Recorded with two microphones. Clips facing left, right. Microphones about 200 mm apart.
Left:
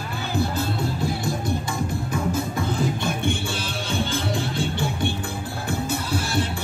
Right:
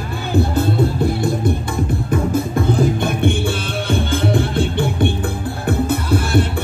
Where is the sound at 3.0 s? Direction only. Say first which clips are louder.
Right 7 dB; 55° right (ahead or behind).